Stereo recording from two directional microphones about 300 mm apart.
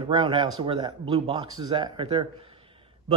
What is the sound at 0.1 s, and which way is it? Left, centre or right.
A man's voice, centre.